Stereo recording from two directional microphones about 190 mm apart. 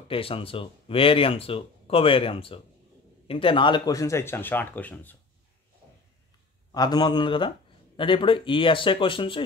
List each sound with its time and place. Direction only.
0.1 s speech: 30° left (ahead or behind); by 5.1 s 10° left (ahead or behind)
6.7 s speech: 20° left (ahead or behind)